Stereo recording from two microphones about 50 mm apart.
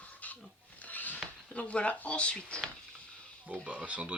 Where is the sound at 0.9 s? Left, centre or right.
Left.